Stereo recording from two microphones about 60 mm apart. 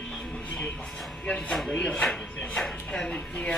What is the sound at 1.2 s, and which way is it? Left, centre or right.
Speech, centre.